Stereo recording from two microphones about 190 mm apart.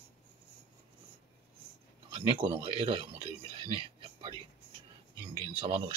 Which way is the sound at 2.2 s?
30° right (ahead or behind).